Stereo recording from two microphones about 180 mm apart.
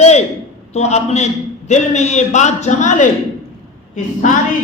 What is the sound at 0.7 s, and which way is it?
A man's voice, 40° left (ahead or behind).